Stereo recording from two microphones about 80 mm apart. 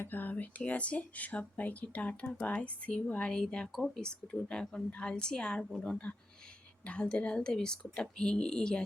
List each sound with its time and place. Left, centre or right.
0.0 s speech: left